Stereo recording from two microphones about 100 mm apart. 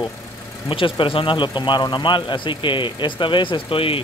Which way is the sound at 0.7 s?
60° left (ahead or behind).